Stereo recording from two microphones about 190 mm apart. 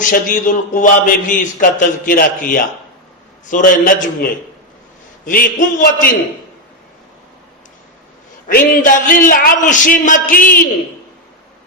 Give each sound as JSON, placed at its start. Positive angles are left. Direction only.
{"t": 0.0, "sound": "a man's voice", "side_deg": 45}
{"t": 8.4, "sound": "a man's voice", "side_deg": 45}